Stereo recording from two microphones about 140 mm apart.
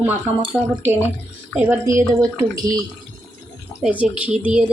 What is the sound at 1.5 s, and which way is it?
Speech, 15° right (ahead or behind).